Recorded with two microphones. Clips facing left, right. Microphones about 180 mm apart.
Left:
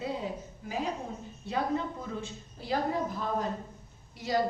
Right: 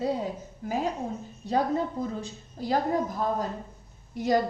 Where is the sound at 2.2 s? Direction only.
40° right (ahead or behind).